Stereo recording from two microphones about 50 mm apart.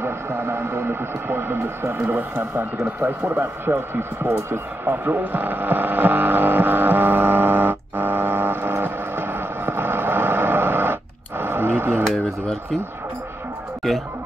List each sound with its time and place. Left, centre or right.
0.0 s speech: right
2.0 s speech: right
2.5 s speech: right
3.3 s speech: right
5.0 s hum: right
13.8 s music: centre